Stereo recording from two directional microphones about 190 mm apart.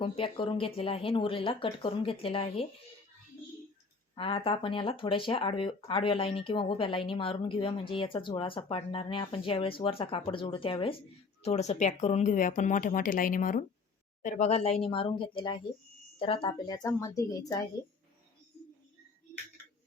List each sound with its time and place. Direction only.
0.0 s speech: 30° left (ahead or behind)
4.1 s speech: 30° left (ahead or behind)